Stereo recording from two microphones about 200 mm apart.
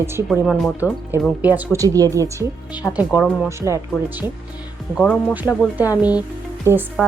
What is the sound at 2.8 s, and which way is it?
Speech, 5° left (ahead or behind).